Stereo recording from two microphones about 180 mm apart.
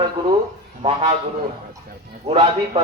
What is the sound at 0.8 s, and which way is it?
Speech, 30° right (ahead or behind).